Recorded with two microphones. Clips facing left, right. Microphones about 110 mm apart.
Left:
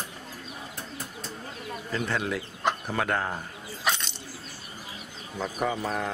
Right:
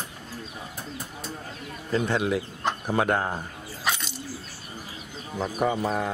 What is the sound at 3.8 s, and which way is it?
Coin, 5° right (ahead or behind).